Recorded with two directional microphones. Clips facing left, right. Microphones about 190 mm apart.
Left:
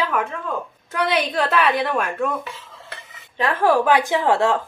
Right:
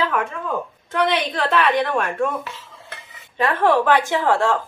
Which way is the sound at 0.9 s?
5° left (ahead or behind).